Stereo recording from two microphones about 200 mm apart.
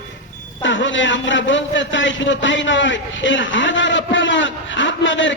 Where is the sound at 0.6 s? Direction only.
70° left (ahead or behind).